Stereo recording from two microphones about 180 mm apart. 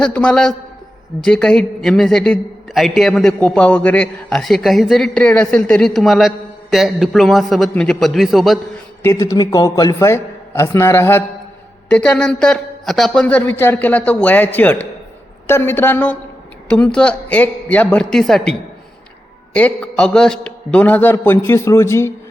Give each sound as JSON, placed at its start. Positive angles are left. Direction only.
{"t": 0.0, "sound": "a man's voice", "side_deg": 5}
{"t": 9.0, "sound": "a man's voice", "side_deg": 15}
{"t": 19.5, "sound": "a man's voice", "side_deg": 5}